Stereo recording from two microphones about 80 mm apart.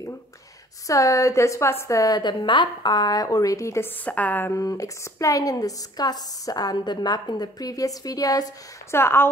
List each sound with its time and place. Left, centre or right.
0.8 s a woman's voice: left
3.8 s a woman's voice: centre
4.6 s a woman's voice: left
8.9 s speech: left